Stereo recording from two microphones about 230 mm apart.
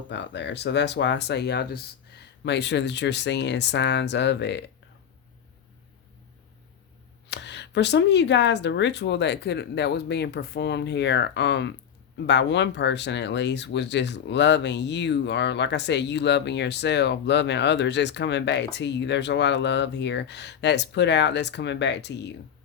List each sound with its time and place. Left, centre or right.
0.1 s speech: left
7.3 s speech: left